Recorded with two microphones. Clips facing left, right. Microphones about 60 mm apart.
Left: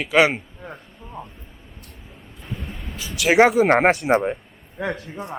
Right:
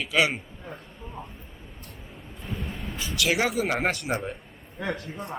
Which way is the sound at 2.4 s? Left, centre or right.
Centre.